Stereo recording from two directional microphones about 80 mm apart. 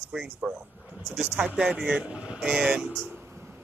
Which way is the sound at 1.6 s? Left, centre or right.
Centre.